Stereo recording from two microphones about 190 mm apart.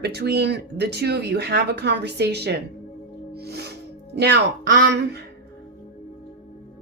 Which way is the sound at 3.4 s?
60° right (ahead or behind).